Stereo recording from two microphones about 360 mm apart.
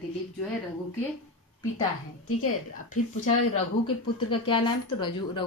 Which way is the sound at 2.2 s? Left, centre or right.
Left.